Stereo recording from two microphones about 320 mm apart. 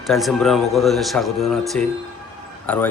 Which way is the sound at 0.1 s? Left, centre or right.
Centre.